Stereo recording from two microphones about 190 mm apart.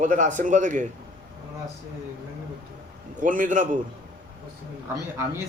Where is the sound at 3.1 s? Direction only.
45° right (ahead or behind).